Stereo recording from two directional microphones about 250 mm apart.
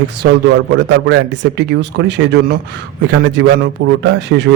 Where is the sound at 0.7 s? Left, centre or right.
Right.